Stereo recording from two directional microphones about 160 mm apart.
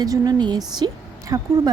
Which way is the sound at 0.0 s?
25° right (ahead or behind).